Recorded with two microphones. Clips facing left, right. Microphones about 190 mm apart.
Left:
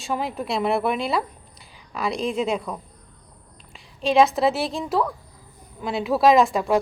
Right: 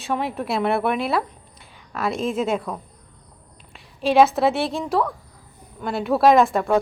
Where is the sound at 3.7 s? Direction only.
Centre (ahead or behind).